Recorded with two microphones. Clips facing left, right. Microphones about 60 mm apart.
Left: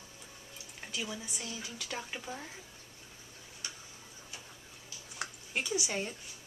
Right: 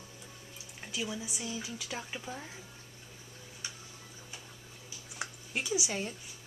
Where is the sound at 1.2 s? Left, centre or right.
Centre.